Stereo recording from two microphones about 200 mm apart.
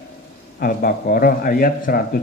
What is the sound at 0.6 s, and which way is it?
A man's voice, 45° left (ahead or behind).